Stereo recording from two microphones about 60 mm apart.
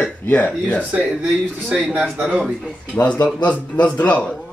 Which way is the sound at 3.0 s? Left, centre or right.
Left.